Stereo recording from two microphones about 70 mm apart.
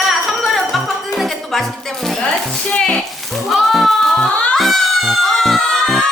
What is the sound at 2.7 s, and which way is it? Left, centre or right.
Speech, centre.